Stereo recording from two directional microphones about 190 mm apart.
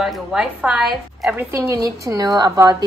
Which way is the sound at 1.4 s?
15° right (ahead or behind).